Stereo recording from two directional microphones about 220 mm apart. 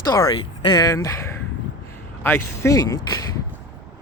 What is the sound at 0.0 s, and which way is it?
Speech, 15° left (ahead or behind).